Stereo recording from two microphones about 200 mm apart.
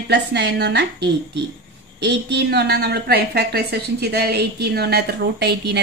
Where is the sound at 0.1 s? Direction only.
55° right (ahead or behind).